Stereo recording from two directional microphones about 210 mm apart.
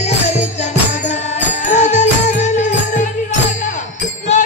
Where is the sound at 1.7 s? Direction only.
35° left (ahead or behind).